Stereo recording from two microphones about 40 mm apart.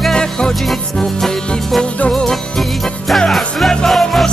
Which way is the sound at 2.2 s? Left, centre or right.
Centre.